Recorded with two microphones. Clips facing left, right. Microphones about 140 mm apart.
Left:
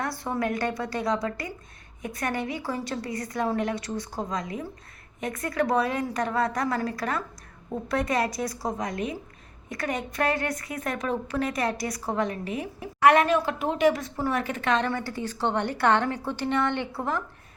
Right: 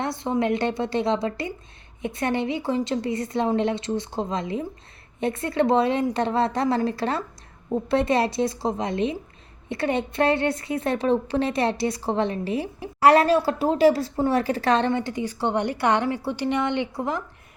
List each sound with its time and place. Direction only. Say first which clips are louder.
0.0 s a woman's voice: right 4 dB; 20° right (ahead or behind)